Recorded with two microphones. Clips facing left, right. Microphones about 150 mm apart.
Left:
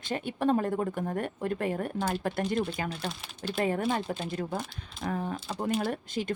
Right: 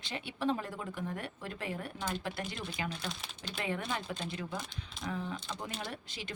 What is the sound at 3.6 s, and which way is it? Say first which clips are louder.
Speech: left 8 dB; 40° left (ahead or behind).